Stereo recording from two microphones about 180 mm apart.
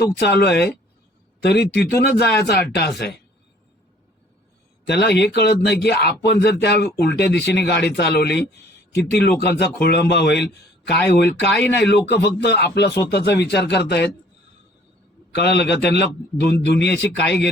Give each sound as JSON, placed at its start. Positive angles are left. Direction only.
{"t": 0.2, "sound": "speech", "side_deg": 65}
{"t": 4.9, "sound": "speech", "side_deg": 70}
{"t": 15.3, "sound": "speech", "side_deg": 70}